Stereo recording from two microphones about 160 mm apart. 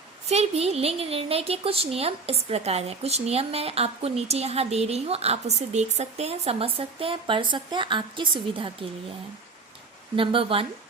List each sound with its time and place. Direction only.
0.3 s speech: 40° right (ahead or behind)
10.2 s speech: 35° right (ahead or behind)